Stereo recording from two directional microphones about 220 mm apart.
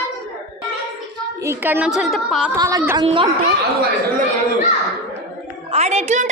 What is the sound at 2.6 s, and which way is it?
Speech, 15° right (ahead or behind).